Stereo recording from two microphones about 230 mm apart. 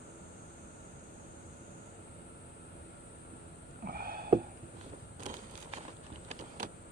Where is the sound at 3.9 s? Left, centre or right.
Right.